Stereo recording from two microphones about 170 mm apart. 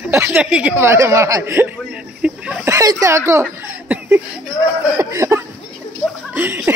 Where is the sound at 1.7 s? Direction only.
5° right (ahead or behind).